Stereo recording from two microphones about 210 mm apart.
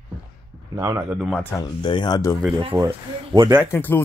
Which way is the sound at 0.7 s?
15° right (ahead or behind).